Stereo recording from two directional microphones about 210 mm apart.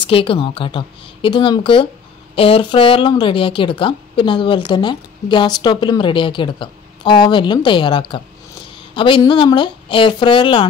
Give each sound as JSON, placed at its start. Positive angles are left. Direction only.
{"t": 0.0, "sound": "a woman's voice", "side_deg": 25}